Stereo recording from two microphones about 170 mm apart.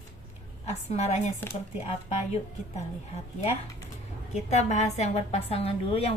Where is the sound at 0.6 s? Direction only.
40° left (ahead or behind).